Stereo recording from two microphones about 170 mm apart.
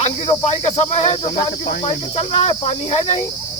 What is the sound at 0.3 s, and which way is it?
Speech, 40° left (ahead or behind).